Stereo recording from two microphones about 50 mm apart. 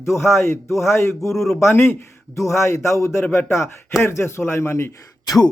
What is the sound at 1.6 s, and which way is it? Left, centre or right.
A man's voice, left.